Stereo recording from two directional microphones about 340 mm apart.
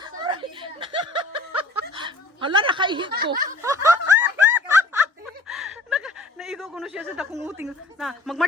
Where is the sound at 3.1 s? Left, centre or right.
Right.